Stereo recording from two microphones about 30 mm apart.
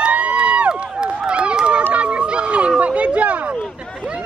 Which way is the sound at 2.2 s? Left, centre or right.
Right.